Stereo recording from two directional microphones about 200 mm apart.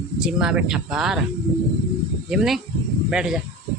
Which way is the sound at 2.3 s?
Centre (ahead or behind).